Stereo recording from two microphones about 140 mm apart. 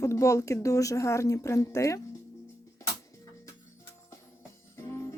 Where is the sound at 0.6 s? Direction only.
25° left (ahead or behind).